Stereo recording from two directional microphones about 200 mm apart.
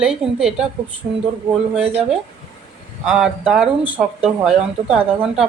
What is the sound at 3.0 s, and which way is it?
A woman's voice, 5° right (ahead or behind).